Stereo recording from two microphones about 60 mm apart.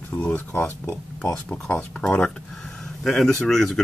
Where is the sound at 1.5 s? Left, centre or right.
Left.